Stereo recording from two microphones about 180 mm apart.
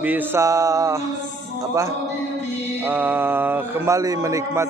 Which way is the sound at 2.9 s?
10° right (ahead or behind).